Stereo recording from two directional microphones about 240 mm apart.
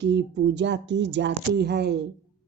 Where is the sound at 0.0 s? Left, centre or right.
Right.